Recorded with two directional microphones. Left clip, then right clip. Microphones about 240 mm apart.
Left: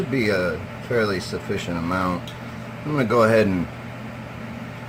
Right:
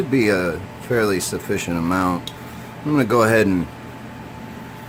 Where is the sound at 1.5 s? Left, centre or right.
Right.